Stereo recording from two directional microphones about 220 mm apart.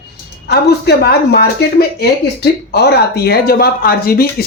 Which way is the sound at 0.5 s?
45° left (ahead or behind).